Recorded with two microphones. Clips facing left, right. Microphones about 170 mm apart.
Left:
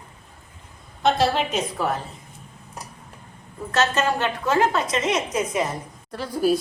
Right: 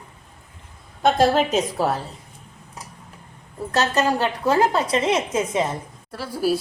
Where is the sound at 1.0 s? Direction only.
45° right (ahead or behind).